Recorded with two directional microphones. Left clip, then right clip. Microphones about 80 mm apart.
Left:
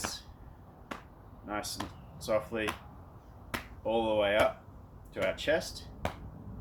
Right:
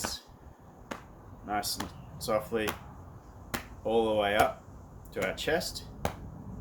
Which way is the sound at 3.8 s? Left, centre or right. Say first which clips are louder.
Right 1 dB; right.